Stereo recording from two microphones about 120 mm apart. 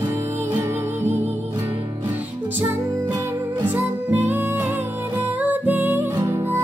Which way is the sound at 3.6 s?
15° right (ahead or behind).